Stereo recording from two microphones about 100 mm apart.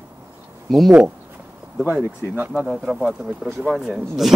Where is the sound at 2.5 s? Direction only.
Centre (ahead or behind).